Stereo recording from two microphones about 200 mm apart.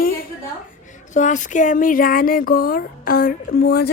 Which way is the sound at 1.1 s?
40° left (ahead or behind).